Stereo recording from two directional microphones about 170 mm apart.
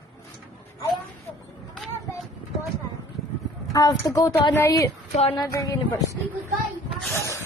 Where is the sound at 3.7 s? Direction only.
20° left (ahead or behind).